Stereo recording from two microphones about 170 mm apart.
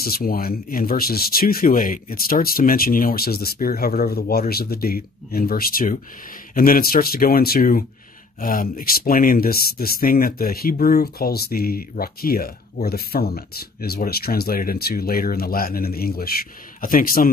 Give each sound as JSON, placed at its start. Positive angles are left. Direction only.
{"t": 0.0, "sound": "speech", "side_deg": 60}